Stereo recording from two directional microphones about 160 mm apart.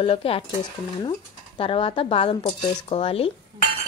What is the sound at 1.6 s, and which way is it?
Speech, 35° left (ahead or behind).